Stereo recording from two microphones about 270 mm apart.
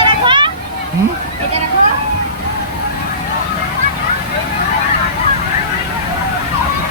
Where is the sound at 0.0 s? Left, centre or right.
Centre.